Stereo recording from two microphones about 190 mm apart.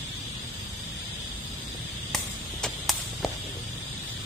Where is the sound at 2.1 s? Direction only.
Centre (ahead or behind).